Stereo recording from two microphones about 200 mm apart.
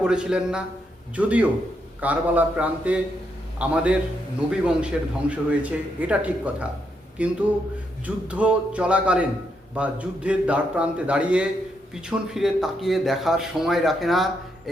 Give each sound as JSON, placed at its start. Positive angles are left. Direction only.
{"t": 0.0, "sound": "a man's voice", "side_deg": -5}